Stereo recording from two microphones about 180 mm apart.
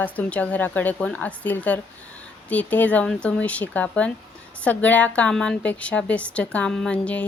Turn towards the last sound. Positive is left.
turn(degrees=5)  # may be behind; listen again after turning